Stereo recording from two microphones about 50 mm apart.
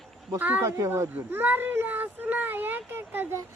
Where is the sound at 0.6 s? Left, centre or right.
Right.